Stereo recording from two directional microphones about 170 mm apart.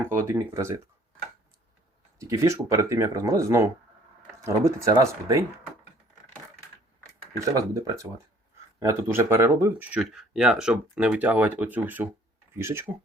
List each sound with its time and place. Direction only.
0.0 s speech: 15° right (ahead or behind)
2.1 s speech: 20° right (ahead or behind)
7.3 s speech: 20° right (ahead or behind)